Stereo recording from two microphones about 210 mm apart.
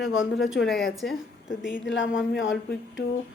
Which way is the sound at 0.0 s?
65° left (ahead or behind).